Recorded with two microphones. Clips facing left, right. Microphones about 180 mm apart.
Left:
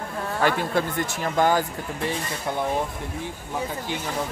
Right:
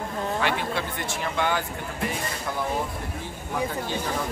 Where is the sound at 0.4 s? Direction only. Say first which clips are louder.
Left 7 dB; 45° left (ahead or behind).